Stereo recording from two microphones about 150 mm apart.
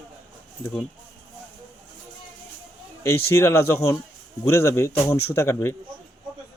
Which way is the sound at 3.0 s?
20° left (ahead or behind).